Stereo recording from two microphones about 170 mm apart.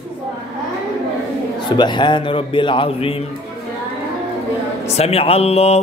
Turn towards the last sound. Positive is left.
turn(degrees=35)  # may be behind; listen again after turning